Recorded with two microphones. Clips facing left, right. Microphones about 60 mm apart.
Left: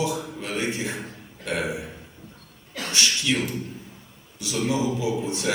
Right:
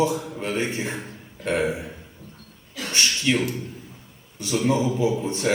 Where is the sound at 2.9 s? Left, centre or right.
Right.